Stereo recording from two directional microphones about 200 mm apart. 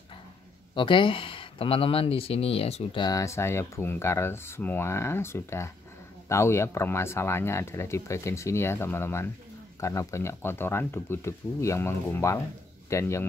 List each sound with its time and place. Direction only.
0.7 s speech: 25° left (ahead or behind)